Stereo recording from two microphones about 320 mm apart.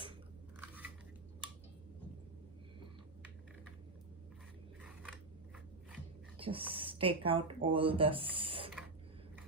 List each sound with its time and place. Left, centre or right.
6.3 s speech: centre